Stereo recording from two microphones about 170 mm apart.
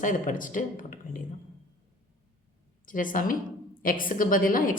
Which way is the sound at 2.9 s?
50° left (ahead or behind).